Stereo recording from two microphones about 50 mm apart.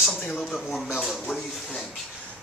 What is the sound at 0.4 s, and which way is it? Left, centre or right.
Speech, centre.